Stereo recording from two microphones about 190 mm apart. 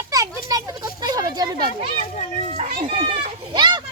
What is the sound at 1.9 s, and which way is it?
Speech, 35° left (ahead or behind).